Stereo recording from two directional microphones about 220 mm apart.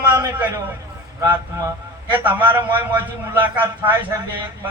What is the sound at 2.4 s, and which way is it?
Speech, 20° right (ahead or behind).